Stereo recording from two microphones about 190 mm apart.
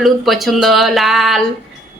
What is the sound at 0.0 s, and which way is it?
Speech, centre (ahead or behind).